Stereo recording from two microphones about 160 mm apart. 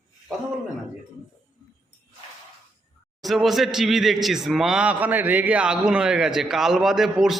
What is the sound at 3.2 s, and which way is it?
A man's voice, centre (ahead or behind).